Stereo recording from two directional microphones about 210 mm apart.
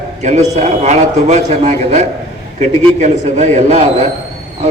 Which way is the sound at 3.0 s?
35° right (ahead or behind).